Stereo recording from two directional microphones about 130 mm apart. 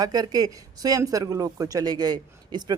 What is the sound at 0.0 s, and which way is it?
Speech, 30° right (ahead or behind).